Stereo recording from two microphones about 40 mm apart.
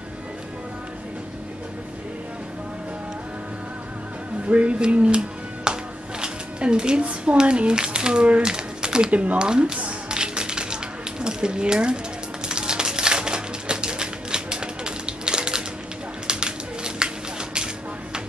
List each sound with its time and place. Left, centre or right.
4.5 s speech: right
4.8 s music: right
6.2 s speech: right
9.1 s speech: right
9.4 s speech: right
9.8 s music: right
10.1 s a sound: right